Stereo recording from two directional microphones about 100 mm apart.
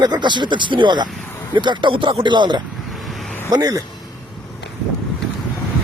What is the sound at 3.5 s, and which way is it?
Speech, 40° right (ahead or behind).